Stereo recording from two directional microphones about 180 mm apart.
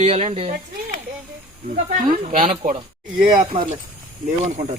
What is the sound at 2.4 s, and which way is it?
Speech, 50° right (ahead or behind).